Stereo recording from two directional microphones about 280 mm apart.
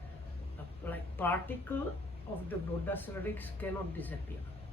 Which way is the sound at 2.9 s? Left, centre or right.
Centre.